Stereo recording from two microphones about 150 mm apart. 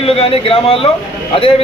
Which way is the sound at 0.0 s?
40° left (ahead or behind).